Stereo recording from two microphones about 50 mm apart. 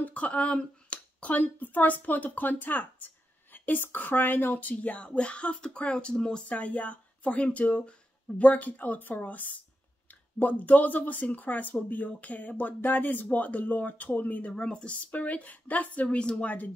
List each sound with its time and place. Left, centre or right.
0.0 s speech: left
6.5 s speech: left
15.0 s speech: left